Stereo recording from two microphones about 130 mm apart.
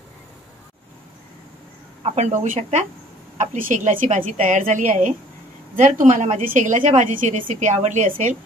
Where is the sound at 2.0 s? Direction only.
60° right (ahead or behind).